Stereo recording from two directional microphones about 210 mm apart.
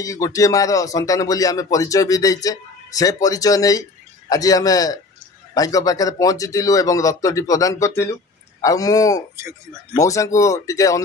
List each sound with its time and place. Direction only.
0.0 s speech: 15° left (ahead or behind)